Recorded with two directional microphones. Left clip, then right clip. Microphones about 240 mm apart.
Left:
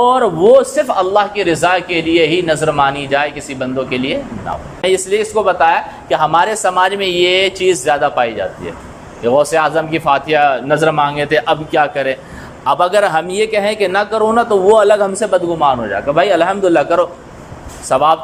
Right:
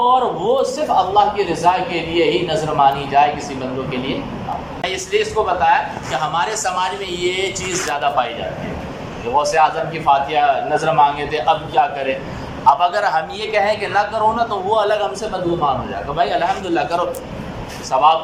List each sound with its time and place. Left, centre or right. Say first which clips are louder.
0.0 s a man's voice: left 5 dB; left
9.4 s a man's voice: right 2 dB; left